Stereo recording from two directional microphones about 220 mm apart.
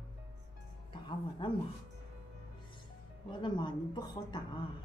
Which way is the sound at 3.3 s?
20° left (ahead or behind).